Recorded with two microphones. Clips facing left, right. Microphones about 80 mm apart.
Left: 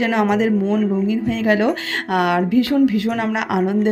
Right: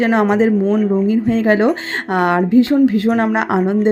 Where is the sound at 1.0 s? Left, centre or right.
Right.